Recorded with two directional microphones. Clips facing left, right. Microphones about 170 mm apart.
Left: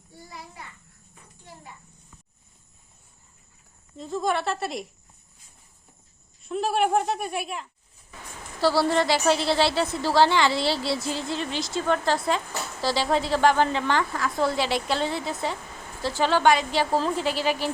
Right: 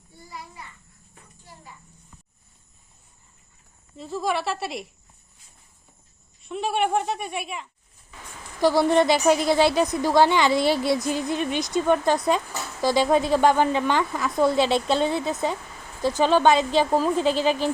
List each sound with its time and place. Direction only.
3.9 s speech: centre (ahead or behind)
6.4 s speech: centre (ahead or behind)
8.6 s a woman's voice: 20° right (ahead or behind)